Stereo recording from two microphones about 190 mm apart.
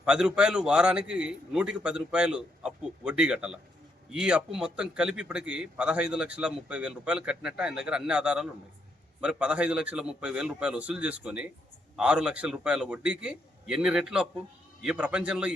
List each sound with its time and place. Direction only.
0.0 s a man's voice: 5° right (ahead or behind)